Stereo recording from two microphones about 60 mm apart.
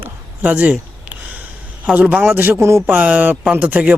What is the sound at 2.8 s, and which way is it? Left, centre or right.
Speech, right.